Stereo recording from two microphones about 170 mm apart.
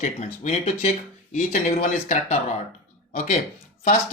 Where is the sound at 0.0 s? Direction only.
40° left (ahead or behind).